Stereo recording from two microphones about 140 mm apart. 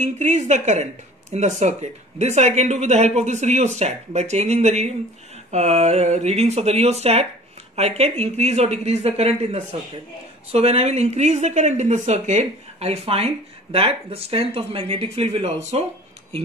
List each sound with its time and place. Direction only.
0.0 s a woman's voice: 55° right (ahead or behind)